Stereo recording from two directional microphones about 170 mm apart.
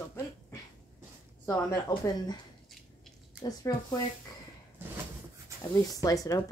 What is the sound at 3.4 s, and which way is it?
Speech, 20° left (ahead or behind).